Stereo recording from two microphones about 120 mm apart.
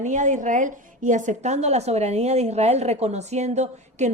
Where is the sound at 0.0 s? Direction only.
90° right.